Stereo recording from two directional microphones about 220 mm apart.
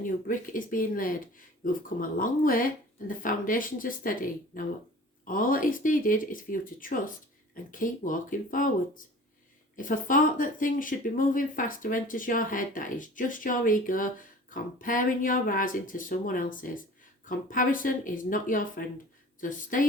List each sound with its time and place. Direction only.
0.0 s speech: 35° left (ahead or behind)